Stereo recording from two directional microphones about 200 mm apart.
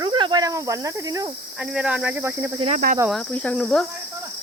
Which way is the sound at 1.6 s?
5° right (ahead or behind).